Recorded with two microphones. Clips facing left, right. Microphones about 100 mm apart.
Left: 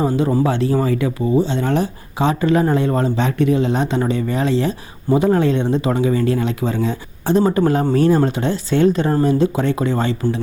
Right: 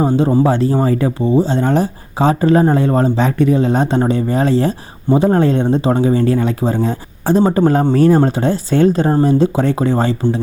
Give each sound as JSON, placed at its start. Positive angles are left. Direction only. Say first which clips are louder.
{"t": 0.0, "sound": "speech", "louder": "right 4 dB", "side_deg": -25}
{"t": 5.0, "sound": "speech", "louder": "right 3 dB", "side_deg": -25}
{"t": 5.3, "sound": "speech", "louder": "right 3 dB", "side_deg": -40}
{"t": 7.4, "sound": "speech", "louder": "right 4 dB", "side_deg": -25}
{"t": 7.9, "sound": "speech", "louder": "right 3 dB", "side_deg": -40}